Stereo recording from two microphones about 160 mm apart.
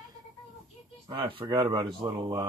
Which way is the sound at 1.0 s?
35° right (ahead or behind).